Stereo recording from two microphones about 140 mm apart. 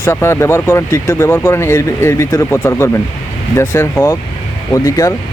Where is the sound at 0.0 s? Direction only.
20° left (ahead or behind).